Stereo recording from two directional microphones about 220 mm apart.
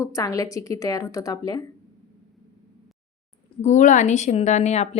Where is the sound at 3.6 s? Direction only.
35° left (ahead or behind).